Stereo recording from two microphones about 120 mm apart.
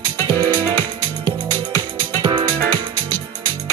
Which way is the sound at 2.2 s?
40° right (ahead or behind).